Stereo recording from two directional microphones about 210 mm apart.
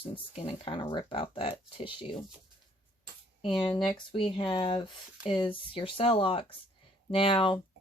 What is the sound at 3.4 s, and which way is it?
Speech, 25° left (ahead or behind).